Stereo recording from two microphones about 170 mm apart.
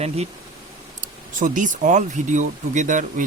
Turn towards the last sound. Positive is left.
turn(degrees=-50)  # may be behind; listen again after turning